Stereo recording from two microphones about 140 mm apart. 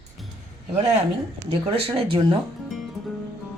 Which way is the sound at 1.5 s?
45° right (ahead or behind).